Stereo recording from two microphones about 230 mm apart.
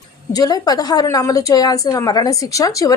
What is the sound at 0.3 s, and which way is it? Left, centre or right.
A woman's voice, centre.